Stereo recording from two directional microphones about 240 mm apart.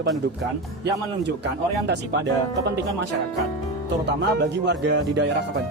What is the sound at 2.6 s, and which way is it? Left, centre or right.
Speech, right.